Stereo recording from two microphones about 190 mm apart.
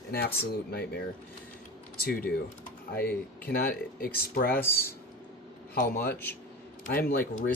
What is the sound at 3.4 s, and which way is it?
Speech, 50° left (ahead or behind).